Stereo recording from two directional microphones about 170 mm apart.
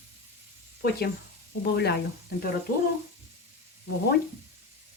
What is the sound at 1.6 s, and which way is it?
Speech, 70° left (ahead or behind).